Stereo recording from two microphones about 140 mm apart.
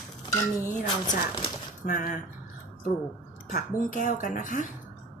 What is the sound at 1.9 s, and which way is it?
Speech, 65° left (ahead or behind).